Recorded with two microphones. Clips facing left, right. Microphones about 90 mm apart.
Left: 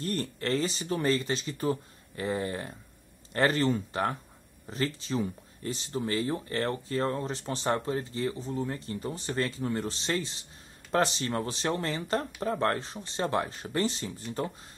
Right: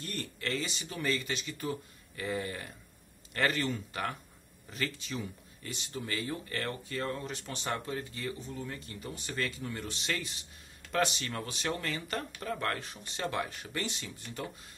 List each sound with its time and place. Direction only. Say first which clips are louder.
0.0 s speech: left 7 dB; 35° left (ahead or behind)